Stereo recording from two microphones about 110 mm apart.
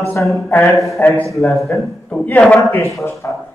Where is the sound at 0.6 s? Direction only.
Centre (ahead or behind).